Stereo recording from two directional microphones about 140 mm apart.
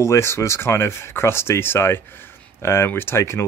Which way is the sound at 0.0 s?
20° left (ahead or behind).